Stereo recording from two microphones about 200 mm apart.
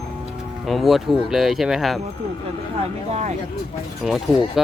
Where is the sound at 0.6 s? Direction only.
Centre (ahead or behind).